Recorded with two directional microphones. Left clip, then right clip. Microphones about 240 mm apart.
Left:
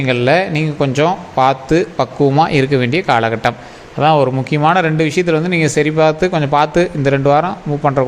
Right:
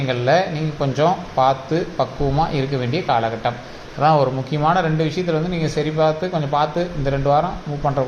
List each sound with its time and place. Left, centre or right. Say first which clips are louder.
0.1 s speech: left 4 dB; left